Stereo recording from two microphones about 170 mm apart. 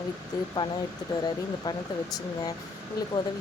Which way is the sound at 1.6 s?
25° left (ahead or behind).